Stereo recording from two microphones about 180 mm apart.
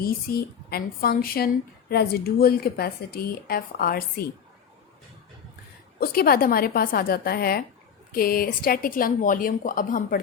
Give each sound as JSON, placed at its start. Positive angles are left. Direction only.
{"t": 0.0, "sound": "speech", "side_deg": 55}
{"t": 6.0, "sound": "speech", "side_deg": 55}